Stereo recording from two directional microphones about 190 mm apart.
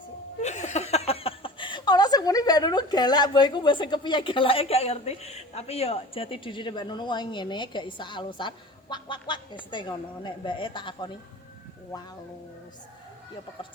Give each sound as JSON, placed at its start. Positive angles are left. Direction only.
{"t": 0.4, "sound": "speech", "side_deg": 35}